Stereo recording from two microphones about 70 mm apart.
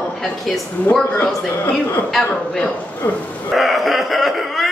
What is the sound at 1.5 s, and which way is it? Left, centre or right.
Speech, left.